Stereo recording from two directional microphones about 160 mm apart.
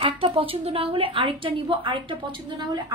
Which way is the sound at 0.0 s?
35° right (ahead or behind).